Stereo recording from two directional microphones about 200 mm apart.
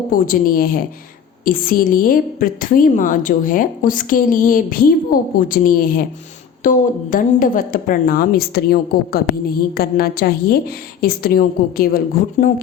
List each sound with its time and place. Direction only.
0.1 s a woman's voice: 45° left (ahead or behind)